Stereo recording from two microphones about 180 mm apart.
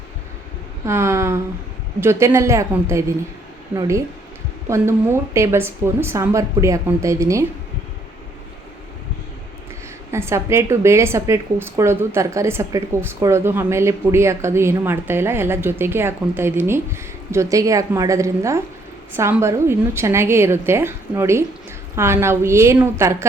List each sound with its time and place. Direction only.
0.9 s a woman's voice: 15° right (ahead or behind)
10.1 s a woman's voice: 15° right (ahead or behind)